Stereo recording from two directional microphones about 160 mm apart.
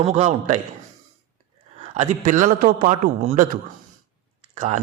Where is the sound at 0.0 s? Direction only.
40° right (ahead or behind).